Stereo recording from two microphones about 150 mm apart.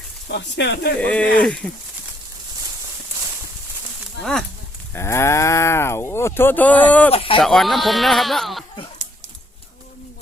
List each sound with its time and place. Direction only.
0.3 s speech: 90° left
0.9 s speech: 10° left (ahead or behind)
4.2 s speech: 5° left (ahead or behind)
4.9 s speech: 20° left (ahead or behind)
7.1 s speech: 35° left (ahead or behind)
7.4 s speech: centre (ahead or behind)